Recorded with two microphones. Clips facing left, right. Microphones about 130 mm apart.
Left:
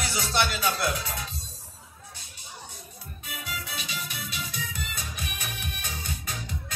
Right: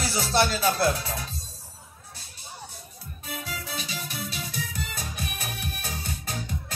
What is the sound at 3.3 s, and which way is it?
Music, 40° right (ahead or behind).